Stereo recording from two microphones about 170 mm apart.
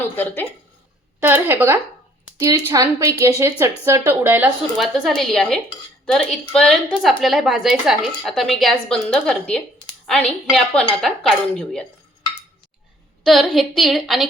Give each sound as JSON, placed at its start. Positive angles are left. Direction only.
{"t": 1.2, "sound": "a woman's voice", "side_deg": -10}
{"t": 4.8, "sound": "a woman's voice", "side_deg": 0}
{"t": 13.2, "sound": "a woman's voice", "side_deg": 0}